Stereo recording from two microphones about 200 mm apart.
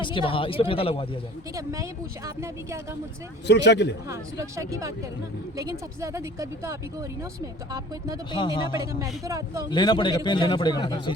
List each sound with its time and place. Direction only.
0.0 s a man's voice: 25° left (ahead or behind)
1.5 s speech: 15° right (ahead or behind)
3.4 s speech: 60° left (ahead or behind)
4.1 s speech: 15° right (ahead or behind)
8.3 s a man's voice: 25° left (ahead or behind)
8.8 s speech: 15° right (ahead or behind)
9.6 s a man's voice: 20° left (ahead or behind)